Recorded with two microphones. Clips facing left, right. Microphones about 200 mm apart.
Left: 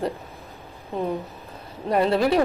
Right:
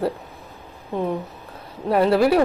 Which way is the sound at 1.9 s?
5° right (ahead or behind).